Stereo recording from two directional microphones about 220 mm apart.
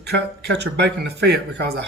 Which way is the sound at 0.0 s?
50° right (ahead or behind).